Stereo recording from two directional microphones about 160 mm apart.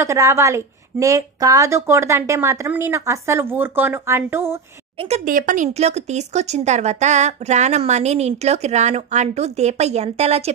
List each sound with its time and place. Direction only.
0.0 s a woman's voice: 20° right (ahead or behind)
4.9 s speech: 40° right (ahead or behind)
5.2 s speech: 60° right (ahead or behind)
5.7 s a woman's voice: 40° right (ahead or behind)